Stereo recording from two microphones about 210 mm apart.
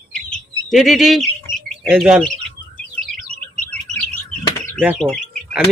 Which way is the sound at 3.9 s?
90° right.